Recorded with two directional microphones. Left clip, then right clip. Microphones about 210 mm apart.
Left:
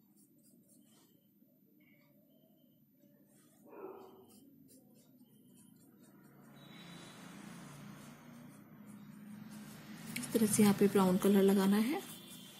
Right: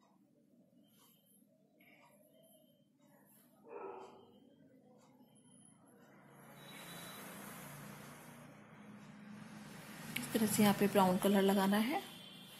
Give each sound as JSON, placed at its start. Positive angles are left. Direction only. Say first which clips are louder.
{"t": 10.1, "sound": "a woman's voice", "louder": "left 3 dB", "side_deg": 20}